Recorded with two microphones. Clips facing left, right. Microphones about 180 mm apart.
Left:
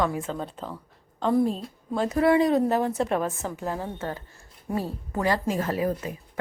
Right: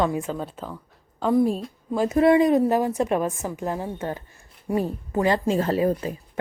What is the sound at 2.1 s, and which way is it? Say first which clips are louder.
A woman's voice: right 3 dB; 20° right (ahead or behind).